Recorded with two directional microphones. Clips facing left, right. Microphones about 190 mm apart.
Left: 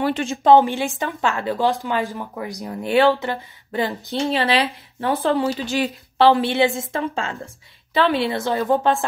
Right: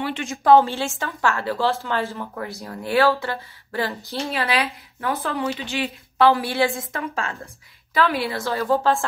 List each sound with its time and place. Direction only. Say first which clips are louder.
0.0 s speech: left 5 dB; 35° left (ahead or behind)
0.4 s a woman's voice: left 1 dB; 20° left (ahead or behind)